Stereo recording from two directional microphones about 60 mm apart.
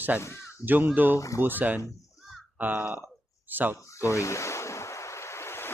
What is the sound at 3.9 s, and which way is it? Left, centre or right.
Ocean, left.